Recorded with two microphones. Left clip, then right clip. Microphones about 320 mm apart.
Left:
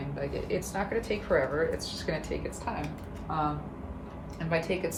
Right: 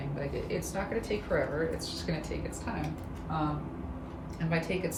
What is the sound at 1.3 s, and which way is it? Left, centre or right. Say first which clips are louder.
Speech: left 4 dB; left.